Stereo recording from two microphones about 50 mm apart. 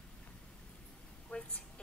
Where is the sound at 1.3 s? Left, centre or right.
Centre.